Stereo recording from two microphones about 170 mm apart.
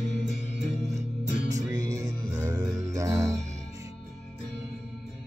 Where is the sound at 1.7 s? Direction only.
20° right (ahead or behind).